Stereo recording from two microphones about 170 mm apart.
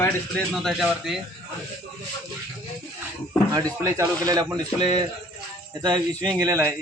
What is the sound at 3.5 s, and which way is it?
A man's voice, 20° right (ahead or behind).